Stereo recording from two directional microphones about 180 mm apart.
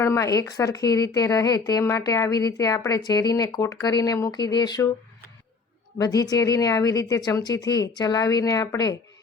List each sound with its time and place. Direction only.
0.0 s speech: 15° left (ahead or behind)
6.0 s speech: 20° left (ahead or behind)